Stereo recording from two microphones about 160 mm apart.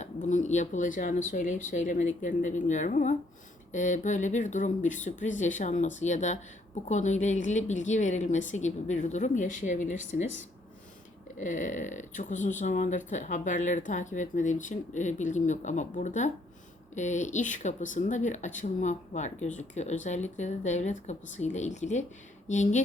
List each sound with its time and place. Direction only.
0.0 s speech: 50° left (ahead or behind)
11.3 s speech: 55° left (ahead or behind)